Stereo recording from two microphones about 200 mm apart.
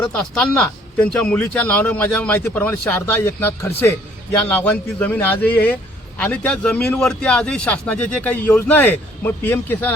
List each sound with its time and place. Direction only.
0.0 s speech: 5° left (ahead or behind)